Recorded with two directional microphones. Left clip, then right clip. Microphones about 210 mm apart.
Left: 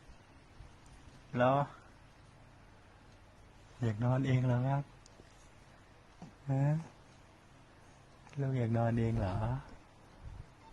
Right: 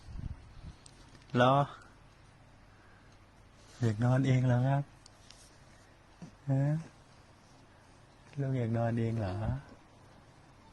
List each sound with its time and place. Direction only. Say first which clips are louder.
1.3 s speech: right 3 dB; 30° right (ahead or behind)
3.8 s speech: right 3 dB; 15° right (ahead or behind)
6.5 s speech: right 2 dB; centre (ahead or behind)
8.3 s speech: right 1 dB; centre (ahead or behind)